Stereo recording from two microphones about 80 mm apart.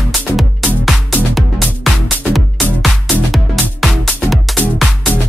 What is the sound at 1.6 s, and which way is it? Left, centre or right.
Music, centre.